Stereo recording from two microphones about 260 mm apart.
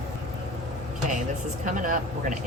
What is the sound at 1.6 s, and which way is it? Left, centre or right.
Speech, right.